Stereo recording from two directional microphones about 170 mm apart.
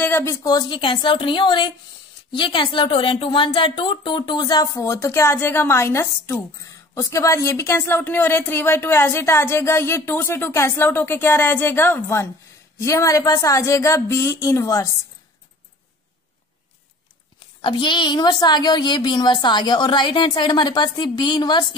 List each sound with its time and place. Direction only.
0.0 s speech: 15° left (ahead or behind)
17.6 s speech: 30° left (ahead or behind)